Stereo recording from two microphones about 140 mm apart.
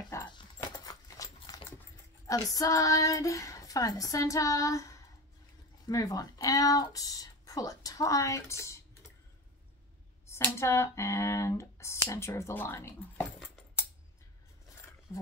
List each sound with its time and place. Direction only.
0.1 s dog: 20° left (ahead or behind)
0.7 s horse: 25° left (ahead or behind)
1.5 s a sound: 25° left (ahead or behind)
2.5 s speech: 25° left (ahead or behind)
10.3 s speech: 20° left (ahead or behind)
15.1 s speech: 20° left (ahead or behind)